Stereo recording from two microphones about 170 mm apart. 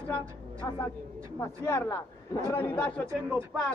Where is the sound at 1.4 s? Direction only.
15° left (ahead or behind).